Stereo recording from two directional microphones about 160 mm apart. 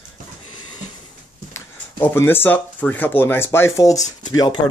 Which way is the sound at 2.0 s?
15° left (ahead or behind).